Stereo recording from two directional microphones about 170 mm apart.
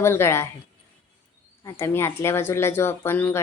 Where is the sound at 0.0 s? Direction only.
15° left (ahead or behind).